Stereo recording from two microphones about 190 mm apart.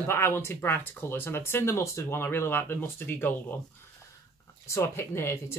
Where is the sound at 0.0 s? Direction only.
10° left (ahead or behind).